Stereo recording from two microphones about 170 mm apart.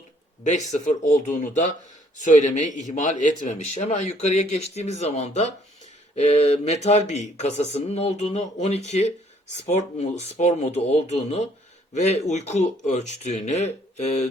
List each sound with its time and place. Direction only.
0.4 s speech: 45° left (ahead or behind)